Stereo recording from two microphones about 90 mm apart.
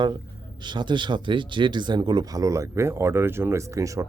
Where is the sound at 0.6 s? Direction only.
55° right (ahead or behind).